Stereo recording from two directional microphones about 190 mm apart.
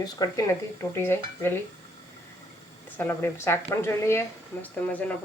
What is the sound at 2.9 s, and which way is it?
Speech, 10° left (ahead or behind).